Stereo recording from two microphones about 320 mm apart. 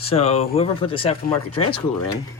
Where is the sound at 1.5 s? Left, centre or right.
Left.